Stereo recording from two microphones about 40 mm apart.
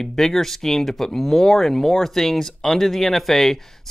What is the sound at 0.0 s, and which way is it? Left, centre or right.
Speech, centre.